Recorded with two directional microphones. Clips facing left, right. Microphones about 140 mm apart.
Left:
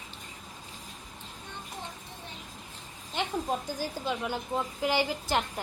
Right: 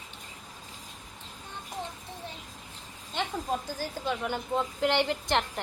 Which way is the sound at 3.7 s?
10° left (ahead or behind).